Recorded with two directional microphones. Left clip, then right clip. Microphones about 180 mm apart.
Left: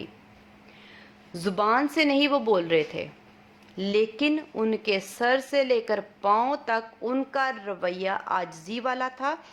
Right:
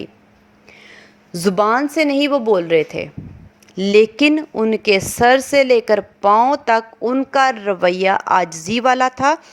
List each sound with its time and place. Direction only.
0.9 s a sound: 45° right (ahead or behind)
1.8 s a woman's voice: 30° right (ahead or behind)
3.8 s speech: 45° right (ahead or behind)